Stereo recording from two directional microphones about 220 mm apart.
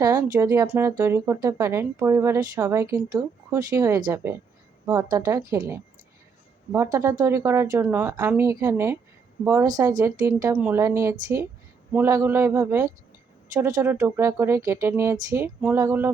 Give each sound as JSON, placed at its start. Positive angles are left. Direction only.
{"t": 0.0, "sound": "speech", "side_deg": -15}